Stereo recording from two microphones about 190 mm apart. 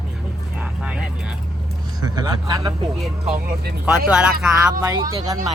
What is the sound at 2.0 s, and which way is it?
Speech, 20° right (ahead or behind).